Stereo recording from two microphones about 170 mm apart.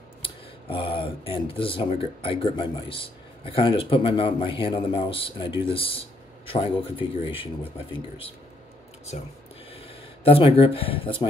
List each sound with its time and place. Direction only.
0.2 s speech: 30° left (ahead or behind)
9.1 s speech: 40° left (ahead or behind)